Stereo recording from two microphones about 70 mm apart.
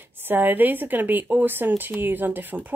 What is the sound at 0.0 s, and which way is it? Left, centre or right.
A woman's voice, right.